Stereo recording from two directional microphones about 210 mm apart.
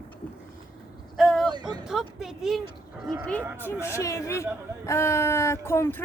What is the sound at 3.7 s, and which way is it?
Speech, 10° left (ahead or behind).